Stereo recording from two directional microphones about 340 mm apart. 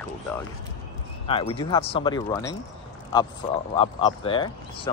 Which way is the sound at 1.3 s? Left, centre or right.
Centre.